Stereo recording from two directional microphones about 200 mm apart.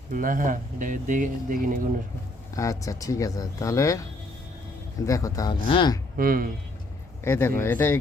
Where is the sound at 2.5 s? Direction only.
15° left (ahead or behind).